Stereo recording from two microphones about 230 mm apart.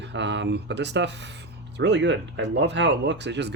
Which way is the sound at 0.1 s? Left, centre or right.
Right.